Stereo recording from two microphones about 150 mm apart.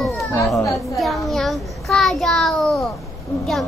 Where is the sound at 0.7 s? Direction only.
Centre (ahead or behind).